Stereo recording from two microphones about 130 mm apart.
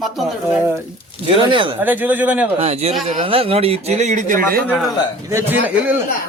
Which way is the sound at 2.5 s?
50° right (ahead or behind).